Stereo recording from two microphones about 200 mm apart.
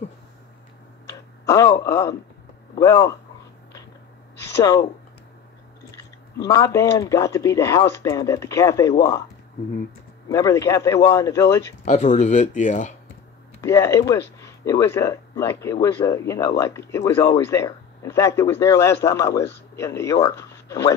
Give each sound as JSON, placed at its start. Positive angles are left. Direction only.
{"t": 1.0, "sound": "a sound", "side_deg": 15}
{"t": 2.8, "sound": "speech", "side_deg": 15}
{"t": 6.3, "sound": "speech", "side_deg": 15}
{"t": 10.2, "sound": "speech", "side_deg": 15}
{"t": 11.8, "sound": "speech", "side_deg": 35}
{"t": 13.6, "sound": "speech", "side_deg": 15}